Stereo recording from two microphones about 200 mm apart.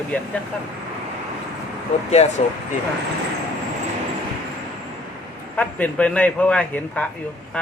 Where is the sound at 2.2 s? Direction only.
35° left (ahead or behind).